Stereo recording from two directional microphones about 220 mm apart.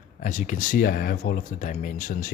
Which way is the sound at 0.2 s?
35° left (ahead or behind).